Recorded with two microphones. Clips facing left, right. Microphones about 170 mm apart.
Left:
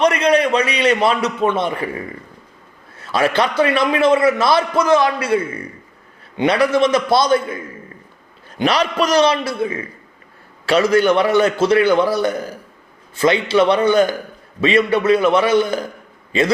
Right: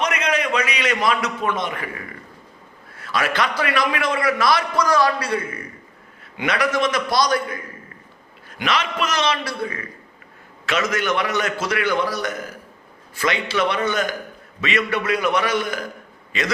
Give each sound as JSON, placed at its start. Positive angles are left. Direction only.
{"t": 0.0, "sound": "a man's voice", "side_deg": 35}
{"t": 2.9, "sound": "a man's voice", "side_deg": 25}